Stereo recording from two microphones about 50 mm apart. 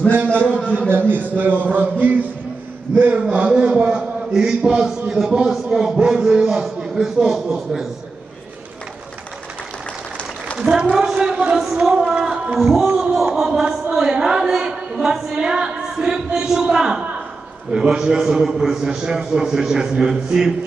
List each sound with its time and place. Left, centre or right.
0.7 s speech: right
1.3 s a sound: right
3.3 s a woman's voice: right
10.6 s a woman's voice: centre
13.1 s a sound: centre
13.9 s a woman's voice: centre